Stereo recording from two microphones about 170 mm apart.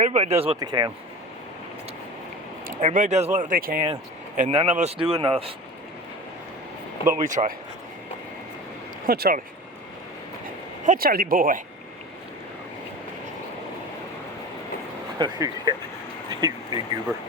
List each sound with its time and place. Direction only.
0.0 s speech: 40° right (ahead or behind)
0.6 s speech: 25° right (ahead or behind)
2.6 s speech: 50° right (ahead or behind)
4.4 s speech: 40° right (ahead or behind)
5.0 s speech: 25° right (ahead or behind)
7.3 s speech: 50° right (ahead or behind)
9.0 s speech: 60° right (ahead or behind)
10.8 s speech: 60° right (ahead or behind)
15.2 s speech: 25° right (ahead or behind)